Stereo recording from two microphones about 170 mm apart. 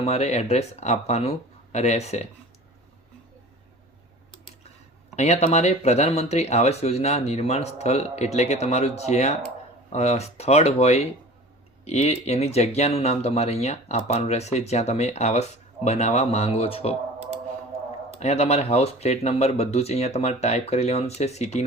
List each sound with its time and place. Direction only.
0.0 s speech: 40° left (ahead or behind)
5.1 s speech: 40° left (ahead or behind)
18.2 s speech: 40° left (ahead or behind)